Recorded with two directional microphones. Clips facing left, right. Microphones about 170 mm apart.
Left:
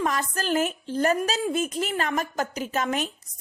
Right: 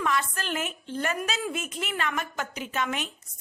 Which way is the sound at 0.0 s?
40° left (ahead or behind).